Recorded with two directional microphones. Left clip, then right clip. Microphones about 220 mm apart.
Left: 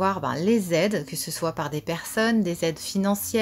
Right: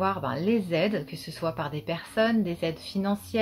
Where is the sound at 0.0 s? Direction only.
45° left (ahead or behind).